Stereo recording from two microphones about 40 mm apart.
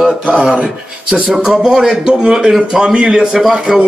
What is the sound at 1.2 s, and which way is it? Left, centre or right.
A man's voice, centre.